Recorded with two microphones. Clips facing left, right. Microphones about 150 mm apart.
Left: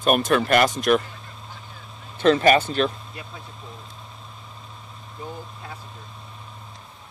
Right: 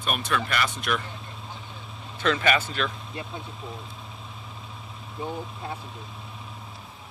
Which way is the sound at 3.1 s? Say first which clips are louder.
Right 3 dB; 25° right (ahead or behind).